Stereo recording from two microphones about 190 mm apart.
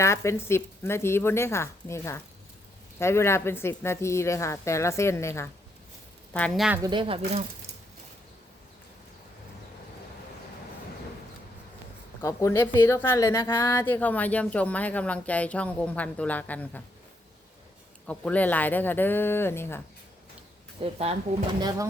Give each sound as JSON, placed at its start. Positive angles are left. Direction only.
{"t": 0.0, "sound": "a woman's voice", "side_deg": 15}
{"t": 6.8, "sound": "speech", "side_deg": -25}
{"t": 12.2, "sound": "a woman's voice", "side_deg": 15}
{"t": 18.0, "sound": "a woman's voice", "side_deg": 5}
{"t": 20.8, "sound": "speech", "side_deg": -30}
{"t": 21.6, "sound": "speech", "side_deg": -20}